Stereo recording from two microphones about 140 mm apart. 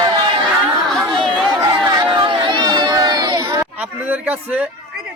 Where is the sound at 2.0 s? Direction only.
35° right (ahead or behind).